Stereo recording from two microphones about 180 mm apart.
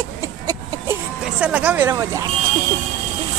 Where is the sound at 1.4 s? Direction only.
5° right (ahead or behind).